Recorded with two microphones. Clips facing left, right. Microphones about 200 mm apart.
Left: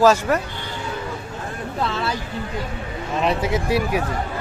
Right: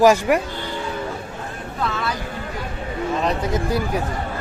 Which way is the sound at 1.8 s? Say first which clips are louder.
Even; 30° left (ahead or behind).